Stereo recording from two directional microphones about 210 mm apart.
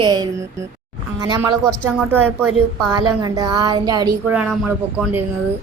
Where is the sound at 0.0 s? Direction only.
20° right (ahead or behind).